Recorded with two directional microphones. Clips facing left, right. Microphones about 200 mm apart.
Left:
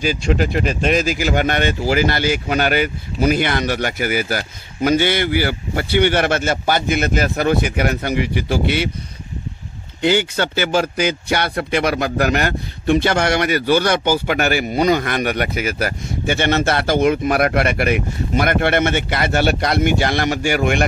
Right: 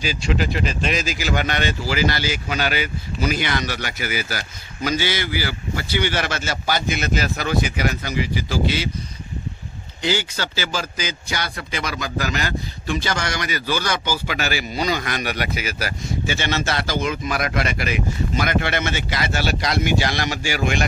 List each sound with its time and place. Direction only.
0.0 s speech: 50° left (ahead or behind)
10.0 s speech: 55° left (ahead or behind)